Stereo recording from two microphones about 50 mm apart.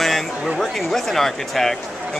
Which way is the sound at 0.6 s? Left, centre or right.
Centre.